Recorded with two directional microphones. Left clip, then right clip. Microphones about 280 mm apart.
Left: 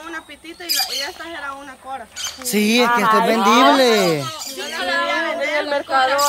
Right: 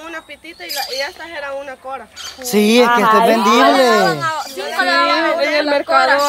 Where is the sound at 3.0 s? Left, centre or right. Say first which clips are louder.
Right 4 dB; right.